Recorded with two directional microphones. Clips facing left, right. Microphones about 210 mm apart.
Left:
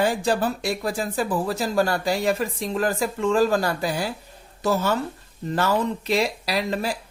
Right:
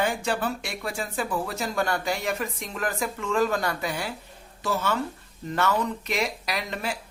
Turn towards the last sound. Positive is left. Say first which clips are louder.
# left 6 dB
turn(degrees=35)  # may be behind; listen again after turning